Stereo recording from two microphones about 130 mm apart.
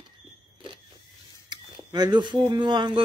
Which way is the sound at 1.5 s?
30° right (ahead or behind).